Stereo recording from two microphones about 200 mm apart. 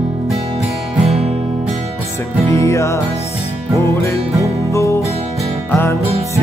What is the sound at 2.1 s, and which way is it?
Music, 15° left (ahead or behind).